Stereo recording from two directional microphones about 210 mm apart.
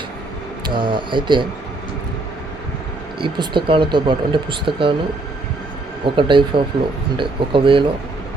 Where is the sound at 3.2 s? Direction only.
25° right (ahead or behind).